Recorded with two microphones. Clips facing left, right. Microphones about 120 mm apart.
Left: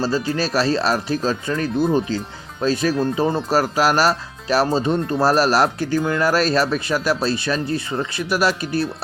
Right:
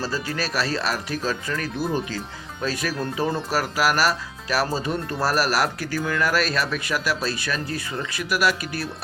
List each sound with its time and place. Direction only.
0.0 s speech: 30° left (ahead or behind)